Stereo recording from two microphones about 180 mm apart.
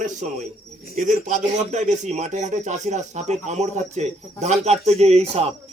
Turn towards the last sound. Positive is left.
turn(degrees=-35)  # may be behind; listen again after turning